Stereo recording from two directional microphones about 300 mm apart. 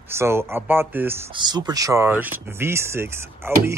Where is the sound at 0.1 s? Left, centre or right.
Centre.